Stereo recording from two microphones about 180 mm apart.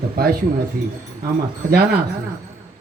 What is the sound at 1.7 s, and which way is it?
Speech, 60° right (ahead or behind).